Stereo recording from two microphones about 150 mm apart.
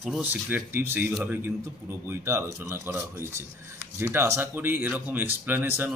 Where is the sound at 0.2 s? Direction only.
10° right (ahead or behind).